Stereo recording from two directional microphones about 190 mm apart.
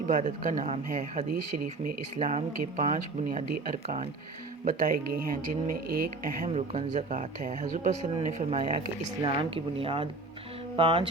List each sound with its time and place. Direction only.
0.1 s speech: 40° right (ahead or behind)
4.6 s speech: 45° right (ahead or behind)
9.0 s speech: 25° right (ahead or behind)